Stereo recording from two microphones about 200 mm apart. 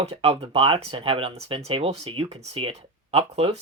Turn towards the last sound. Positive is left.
turn(degrees=-30)  # may be behind; listen again after turning